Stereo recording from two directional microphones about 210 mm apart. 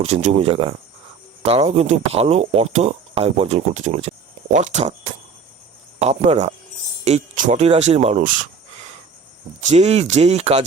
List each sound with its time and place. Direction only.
0.0 s speech: 30° right (ahead or behind)
9.6 s speech: 35° right (ahead or behind)